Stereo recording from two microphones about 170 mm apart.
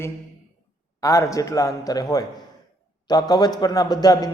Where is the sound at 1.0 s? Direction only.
20° left (ahead or behind).